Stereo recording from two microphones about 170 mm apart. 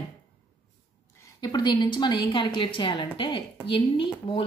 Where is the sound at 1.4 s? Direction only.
25° left (ahead or behind).